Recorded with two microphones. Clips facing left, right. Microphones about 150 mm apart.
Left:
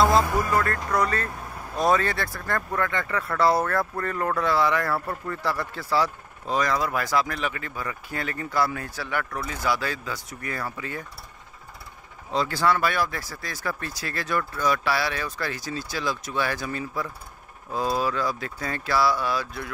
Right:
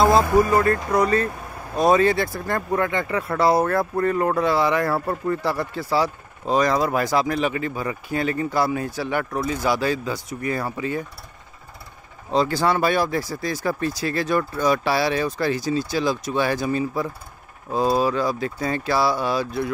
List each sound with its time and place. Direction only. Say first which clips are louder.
0.0 s speech: right 4 dB; 15° right (ahead or behind)
6.0 s speech: right 5 dB; 25° right (ahead or behind)
12.3 s speech: right 3 dB; 25° right (ahead or behind)